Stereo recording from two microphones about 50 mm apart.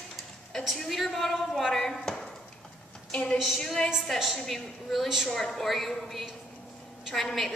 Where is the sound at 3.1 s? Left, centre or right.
Left.